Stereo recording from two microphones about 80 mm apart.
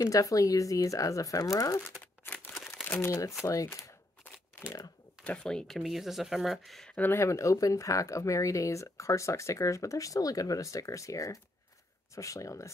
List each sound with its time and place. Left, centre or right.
0.0 s speech: left
2.2 s crumpling: left
3.0 s speech: left
3.6 s a sound: left
4.6 s speech: left
5.2 s speech: centre
5.8 s speech: centre
7.0 s speech: left